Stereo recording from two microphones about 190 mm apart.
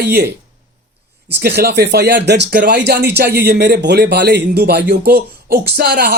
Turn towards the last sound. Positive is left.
turn(degrees=-55)  # may be behind; listen again after turning